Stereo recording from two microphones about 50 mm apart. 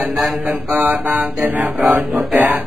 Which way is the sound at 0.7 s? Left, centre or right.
Right.